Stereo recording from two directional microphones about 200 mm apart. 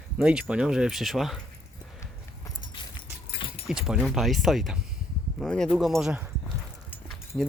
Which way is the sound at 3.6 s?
5° right (ahead or behind).